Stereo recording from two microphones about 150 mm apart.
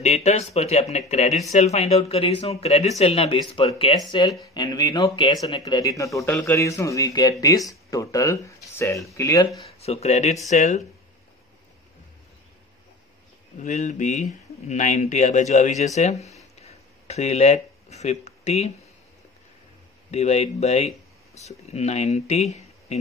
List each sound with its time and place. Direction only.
0.0 s speech: 50° left (ahead or behind); by 9.5 s 20° left (ahead or behind)
9.7 s speech: 45° left (ahead or behind)
13.6 s speech: 55° left (ahead or behind)
16.6 s a sound: 45° left (ahead or behind)
20.1 s speech: 45° left (ahead or behind)